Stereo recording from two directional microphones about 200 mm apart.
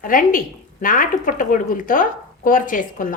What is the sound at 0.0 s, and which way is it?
A woman's voice, 45° left (ahead or behind).